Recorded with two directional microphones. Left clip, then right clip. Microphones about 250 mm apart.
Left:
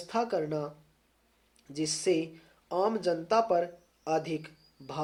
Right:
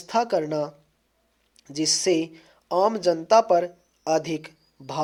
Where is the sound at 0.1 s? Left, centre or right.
Right.